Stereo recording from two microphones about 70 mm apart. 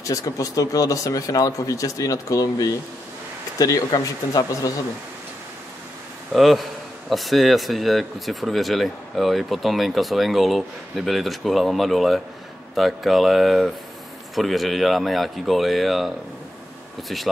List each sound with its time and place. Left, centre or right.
0.0 s speech: left
6.3 s speech: centre
17.1 s speech: centre